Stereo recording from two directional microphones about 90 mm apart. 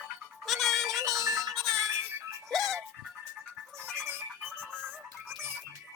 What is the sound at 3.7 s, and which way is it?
Music, 30° right (ahead or behind).